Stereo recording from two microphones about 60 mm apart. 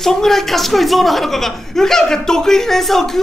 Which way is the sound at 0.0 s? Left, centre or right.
Centre.